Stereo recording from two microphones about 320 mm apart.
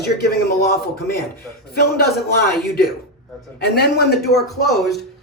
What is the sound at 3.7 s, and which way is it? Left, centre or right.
Speech, left.